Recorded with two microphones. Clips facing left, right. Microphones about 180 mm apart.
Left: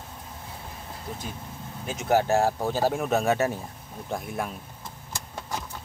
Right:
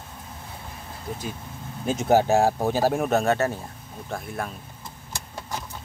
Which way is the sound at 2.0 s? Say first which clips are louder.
Right 3 dB; 20° right (ahead or behind).